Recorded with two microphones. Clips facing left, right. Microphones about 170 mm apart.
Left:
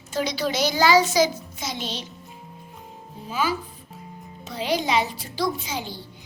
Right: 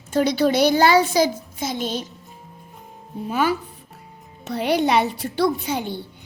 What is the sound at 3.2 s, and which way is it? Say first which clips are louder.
A child's voice: right 4 dB; 60° right (ahead or behind).